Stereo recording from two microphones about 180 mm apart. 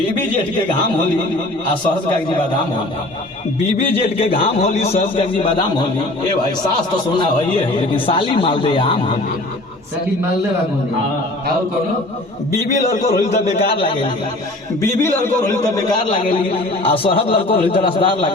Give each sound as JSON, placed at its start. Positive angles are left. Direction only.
{"t": 4.0, "sound": "a man's voice", "side_deg": 30}
{"t": 7.9, "sound": "speech", "side_deg": 30}
{"t": 13.1, "sound": "a man's voice", "side_deg": 40}
{"t": 14.8, "sound": "a man's voice", "side_deg": 15}
{"t": 16.4, "sound": "a man's voice", "side_deg": 30}